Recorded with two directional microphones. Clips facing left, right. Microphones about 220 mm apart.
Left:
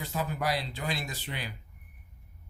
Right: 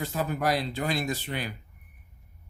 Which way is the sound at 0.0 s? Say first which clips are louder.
Right 4 dB; 50° right (ahead or behind).